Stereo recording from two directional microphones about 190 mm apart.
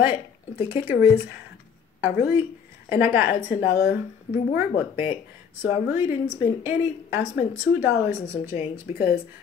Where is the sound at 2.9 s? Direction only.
10° right (ahead or behind).